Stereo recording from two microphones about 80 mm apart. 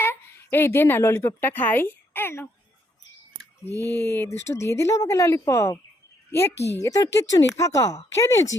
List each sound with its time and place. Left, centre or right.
0.0 s a woman's voice: left
3.7 s speech: left
6.8 s speech: left